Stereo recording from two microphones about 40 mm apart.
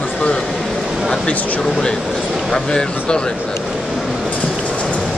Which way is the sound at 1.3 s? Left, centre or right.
Left.